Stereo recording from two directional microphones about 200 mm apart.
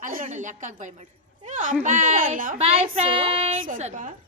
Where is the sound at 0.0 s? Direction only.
45° right (ahead or behind).